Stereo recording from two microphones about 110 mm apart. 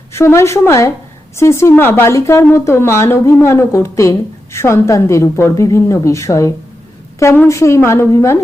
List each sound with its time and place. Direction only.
0.1 s speech: 25° left (ahead or behind)